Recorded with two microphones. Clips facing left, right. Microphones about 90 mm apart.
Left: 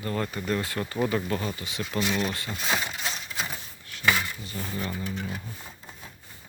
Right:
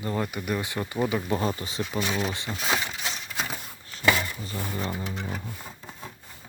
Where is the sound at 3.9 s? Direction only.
35° right (ahead or behind).